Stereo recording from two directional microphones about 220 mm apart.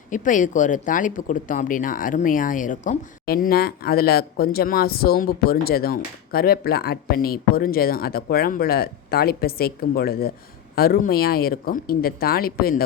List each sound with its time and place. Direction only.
0.1 s speech: 35° left (ahead or behind)